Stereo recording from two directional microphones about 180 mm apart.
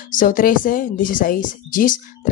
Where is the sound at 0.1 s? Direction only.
50° left (ahead or behind).